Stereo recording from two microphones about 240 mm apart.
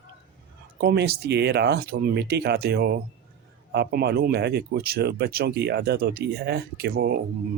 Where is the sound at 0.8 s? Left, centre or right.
Right.